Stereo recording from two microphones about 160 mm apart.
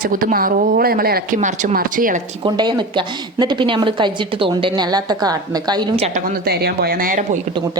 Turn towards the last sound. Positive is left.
turn(degrees=-55)  # may be behind; listen again after turning